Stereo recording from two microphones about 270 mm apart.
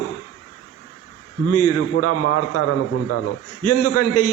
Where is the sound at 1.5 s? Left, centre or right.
Left.